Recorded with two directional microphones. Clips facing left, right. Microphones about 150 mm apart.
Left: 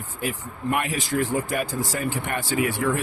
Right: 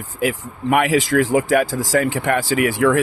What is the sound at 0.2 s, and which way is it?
Speech, 90° right.